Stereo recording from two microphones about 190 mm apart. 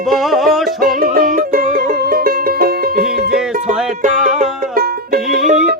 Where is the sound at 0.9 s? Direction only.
50° right (ahead or behind).